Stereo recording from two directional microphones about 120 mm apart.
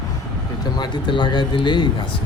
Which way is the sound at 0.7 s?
40° left (ahead or behind).